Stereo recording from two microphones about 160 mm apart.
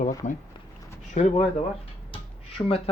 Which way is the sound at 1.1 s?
50° left (ahead or behind).